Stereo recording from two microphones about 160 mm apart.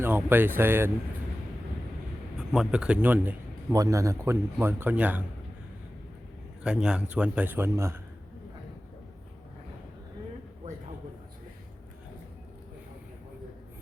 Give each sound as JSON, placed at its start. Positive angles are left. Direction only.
{"t": 0.0, "sound": "speech", "side_deg": -15}
{"t": 2.5, "sound": "speech", "side_deg": -5}
{"t": 6.6, "sound": "speech", "side_deg": -5}